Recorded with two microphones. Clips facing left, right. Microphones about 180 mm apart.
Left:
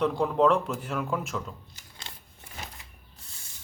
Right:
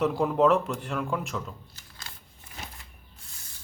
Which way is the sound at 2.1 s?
25° left (ahead or behind).